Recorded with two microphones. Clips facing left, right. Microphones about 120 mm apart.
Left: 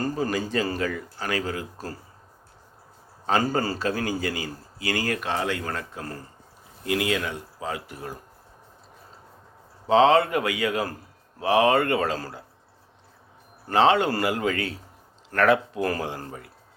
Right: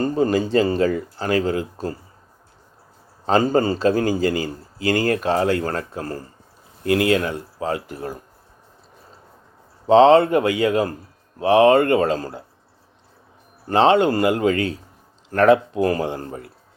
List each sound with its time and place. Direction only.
0.0 s speech: 25° right (ahead or behind)
3.2 s speech: 30° right (ahead or behind)
4.4 s speech: 45° right (ahead or behind)
6.8 s speech: 55° right (ahead or behind)
7.2 s speech: 40° right (ahead or behind)
9.8 s speech: 30° right (ahead or behind)
13.7 s speech: 25° right (ahead or behind)